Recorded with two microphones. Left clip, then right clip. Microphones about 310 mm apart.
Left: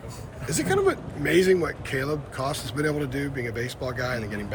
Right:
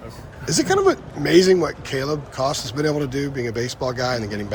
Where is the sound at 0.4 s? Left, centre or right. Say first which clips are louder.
Right 6 dB; right.